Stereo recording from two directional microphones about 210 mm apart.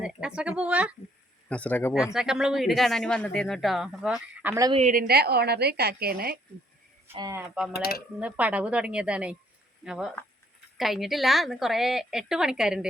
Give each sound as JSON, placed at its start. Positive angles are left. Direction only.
{"t": 0.0, "sound": "a sound", "side_deg": -5}
{"t": 1.5, "sound": "speech", "side_deg": 5}
{"t": 2.1, "sound": "speech", "side_deg": -5}
{"t": 4.7, "sound": "a woman's voice", "side_deg": -35}
{"t": 7.1, "sound": "speech", "side_deg": -20}
{"t": 7.7, "sound": "speech", "side_deg": 45}
{"t": 8.2, "sound": "speech", "side_deg": -5}